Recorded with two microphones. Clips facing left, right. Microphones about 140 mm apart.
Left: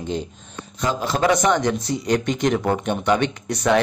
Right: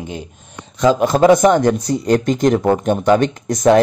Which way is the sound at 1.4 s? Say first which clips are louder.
Right 7 dB; 45° right (ahead or behind).